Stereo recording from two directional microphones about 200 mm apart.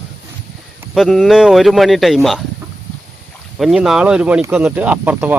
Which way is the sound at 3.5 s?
5° right (ahead or behind).